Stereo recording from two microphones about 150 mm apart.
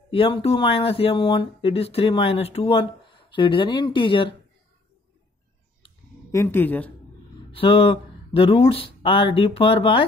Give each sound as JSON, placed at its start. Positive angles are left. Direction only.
{"t": 0.1, "sound": "speech", "side_deg": 35}
{"t": 6.3, "sound": "a woman's voice", "side_deg": 15}
{"t": 7.5, "sound": "speech", "side_deg": 35}